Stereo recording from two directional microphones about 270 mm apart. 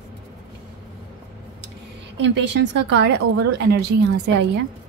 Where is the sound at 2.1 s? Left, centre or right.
Right.